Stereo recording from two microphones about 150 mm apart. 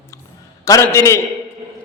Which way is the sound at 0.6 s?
20° left (ahead or behind).